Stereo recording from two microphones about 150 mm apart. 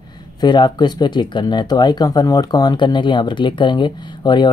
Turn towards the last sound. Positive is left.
turn(degrees=30)  # may be behind; listen again after turning